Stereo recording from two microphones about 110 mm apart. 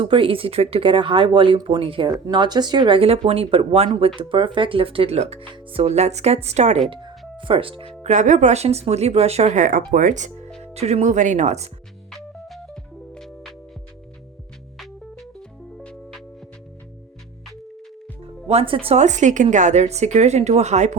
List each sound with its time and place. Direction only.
0.0 s speech: 50° right (ahead or behind)
2.0 s speech: 30° right (ahead or behind)
2.3 s speech: 40° right (ahead or behind); by 5.4 s 70° right (ahead or behind)
5.9 s speech: 90° right
7.3 s speech: 50° right (ahead or behind)
8.0 s speech: 90° right; by 9.6 s 75° right (ahead or behind)
10.2 s speech: 90° right
10.6 s speech: 75° right (ahead or behind)
12.1 s music: centre (ahead or behind)
14.8 s music: 5° left (ahead or behind)
18.4 s a woman's voice: 60° right (ahead or behind); by 20.9 s 90° right